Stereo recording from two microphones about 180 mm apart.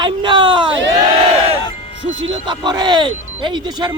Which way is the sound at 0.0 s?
25° right (ahead or behind).